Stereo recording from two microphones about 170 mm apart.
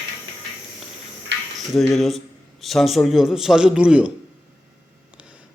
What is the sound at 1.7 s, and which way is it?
A man's voice, centre (ahead or behind).